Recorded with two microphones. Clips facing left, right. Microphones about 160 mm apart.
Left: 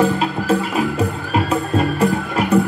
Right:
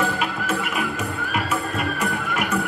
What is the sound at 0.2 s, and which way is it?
Music, 30° left (ahead or behind).